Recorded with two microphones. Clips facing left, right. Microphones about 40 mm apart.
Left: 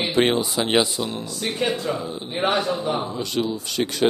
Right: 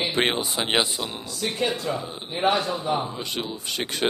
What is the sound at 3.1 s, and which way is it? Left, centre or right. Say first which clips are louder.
Speech: left 6 dB; right.